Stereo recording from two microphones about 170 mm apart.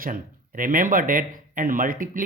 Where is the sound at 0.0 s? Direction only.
55° right (ahead or behind).